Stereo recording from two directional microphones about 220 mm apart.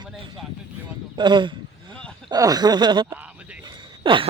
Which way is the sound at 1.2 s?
20° right (ahead or behind).